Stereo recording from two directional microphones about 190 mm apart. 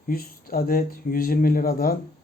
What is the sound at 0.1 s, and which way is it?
Speech, 50° left (ahead or behind).